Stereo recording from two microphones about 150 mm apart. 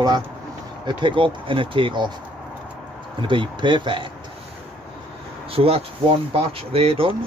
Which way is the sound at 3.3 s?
30° right (ahead or behind).